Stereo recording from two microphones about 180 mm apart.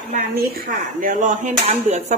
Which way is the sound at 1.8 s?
40° right (ahead or behind).